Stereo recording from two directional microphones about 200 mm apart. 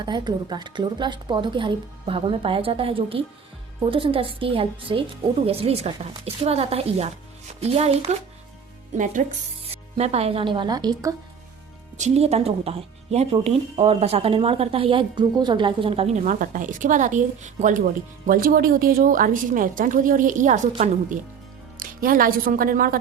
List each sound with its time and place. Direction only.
0.0 s speech: 25° right (ahead or behind)
9.0 s speech: 40° right (ahead or behind); by 11.1 s 20° right (ahead or behind)
11.9 s a woman's voice: 35° right (ahead or behind)